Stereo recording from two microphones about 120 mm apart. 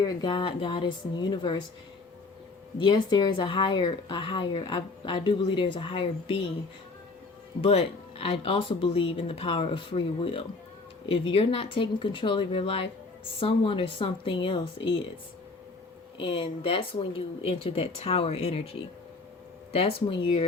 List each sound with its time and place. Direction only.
0.0 s speech: 40° left (ahead or behind)
2.7 s speech: 40° left (ahead or behind)
7.6 s speech: 55° left (ahead or behind)
16.1 s speech: 45° left (ahead or behind)
19.7 s speech: 50° left (ahead or behind)